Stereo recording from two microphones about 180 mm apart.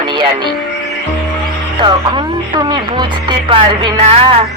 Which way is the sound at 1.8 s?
25° right (ahead or behind).